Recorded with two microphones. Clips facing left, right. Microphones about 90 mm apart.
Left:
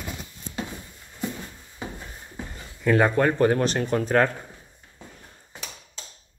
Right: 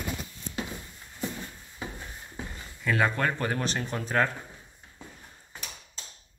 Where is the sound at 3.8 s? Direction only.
55° left (ahead or behind).